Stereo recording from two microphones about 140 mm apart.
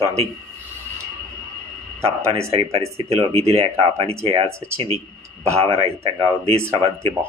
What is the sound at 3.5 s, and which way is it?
Speech, 45° right (ahead or behind).